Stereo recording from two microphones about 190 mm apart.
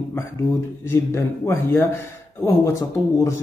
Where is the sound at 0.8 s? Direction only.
15° left (ahead or behind).